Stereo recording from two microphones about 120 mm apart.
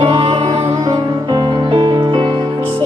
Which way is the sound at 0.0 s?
40° right (ahead or behind).